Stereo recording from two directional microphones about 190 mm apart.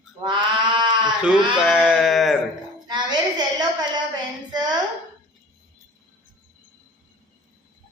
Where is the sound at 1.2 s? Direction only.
5° right (ahead or behind).